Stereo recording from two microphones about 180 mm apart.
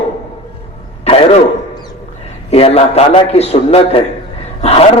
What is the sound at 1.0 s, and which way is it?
Throat clearing, 30° left (ahead or behind).